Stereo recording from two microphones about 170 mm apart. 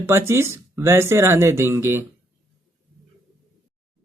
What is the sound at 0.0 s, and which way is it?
Speech, 15° right (ahead or behind).